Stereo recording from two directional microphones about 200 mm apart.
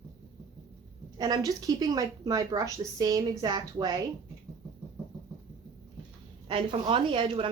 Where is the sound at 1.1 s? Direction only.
20° right (ahead or behind).